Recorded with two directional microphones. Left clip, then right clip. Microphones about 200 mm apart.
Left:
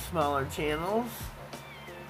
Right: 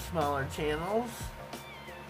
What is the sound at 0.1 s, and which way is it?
Speech, 20° left (ahead or behind).